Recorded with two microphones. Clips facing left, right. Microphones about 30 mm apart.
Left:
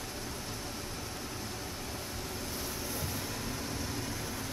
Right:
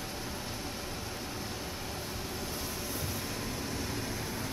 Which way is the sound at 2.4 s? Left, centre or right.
Centre.